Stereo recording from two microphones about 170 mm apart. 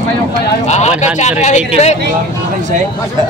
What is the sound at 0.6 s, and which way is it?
Speech, 40° left (ahead or behind).